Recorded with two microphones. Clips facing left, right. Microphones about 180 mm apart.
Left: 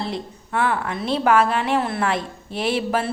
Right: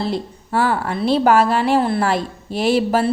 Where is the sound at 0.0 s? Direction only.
35° right (ahead or behind).